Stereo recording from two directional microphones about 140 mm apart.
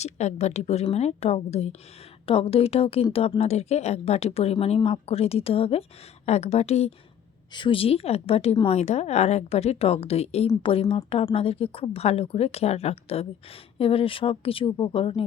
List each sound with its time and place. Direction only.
0.0 s speech: 55° left (ahead or behind)
7.5 s speech: 35° left (ahead or behind)